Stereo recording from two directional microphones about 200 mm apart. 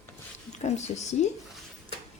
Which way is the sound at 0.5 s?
35° left (ahead or behind).